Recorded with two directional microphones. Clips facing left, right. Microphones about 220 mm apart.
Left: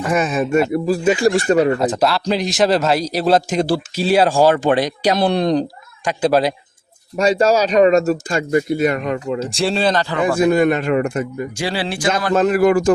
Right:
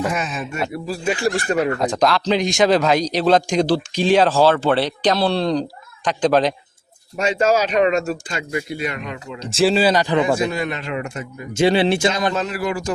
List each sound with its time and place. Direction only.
0.1 s speech: 50° left (ahead or behind)
1.5 s speech: 30° left (ahead or behind)
1.8 s a man's voice: 5° left (ahead or behind)
7.2 s speech: 35° left (ahead or behind)
9.4 s speech: centre (ahead or behind)
10.3 s speech: 50° left (ahead or behind)
11.5 s speech: 20° right (ahead or behind)
12.3 s speech: 50° left (ahead or behind)